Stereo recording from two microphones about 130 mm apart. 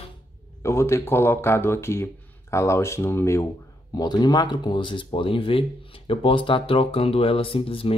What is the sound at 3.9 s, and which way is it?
Speech, 35° left (ahead or behind).